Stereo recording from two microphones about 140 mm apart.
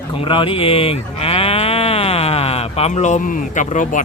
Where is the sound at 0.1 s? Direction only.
35° left (ahead or behind); by 4.0 s 65° left (ahead or behind).